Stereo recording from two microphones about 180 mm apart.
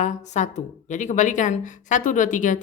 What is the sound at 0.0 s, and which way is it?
Speech, 40° left (ahead or behind).